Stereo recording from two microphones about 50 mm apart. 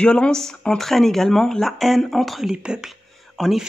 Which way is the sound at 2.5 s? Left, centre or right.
Centre.